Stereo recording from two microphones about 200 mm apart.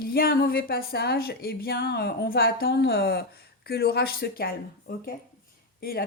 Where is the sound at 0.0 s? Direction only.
50° left (ahead or behind).